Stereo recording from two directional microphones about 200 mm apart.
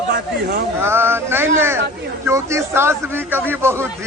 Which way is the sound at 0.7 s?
10° right (ahead or behind).